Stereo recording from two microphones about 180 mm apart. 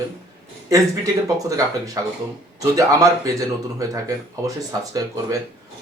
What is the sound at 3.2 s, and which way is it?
Speech, 20° right (ahead or behind).